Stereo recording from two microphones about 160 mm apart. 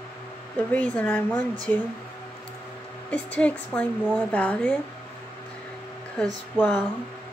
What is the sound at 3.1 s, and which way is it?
A woman's voice, 10° left (ahead or behind).